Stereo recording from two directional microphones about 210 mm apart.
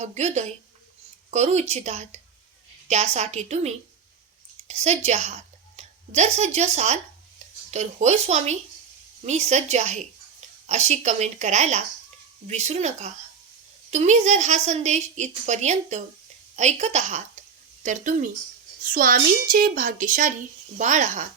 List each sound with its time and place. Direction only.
0.0 s a woman's voice: 35° right (ahead or behind)
4.7 s a woman's voice: 30° right (ahead or behind)